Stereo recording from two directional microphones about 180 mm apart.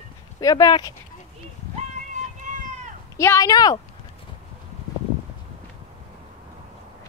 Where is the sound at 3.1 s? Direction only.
15° left (ahead or behind).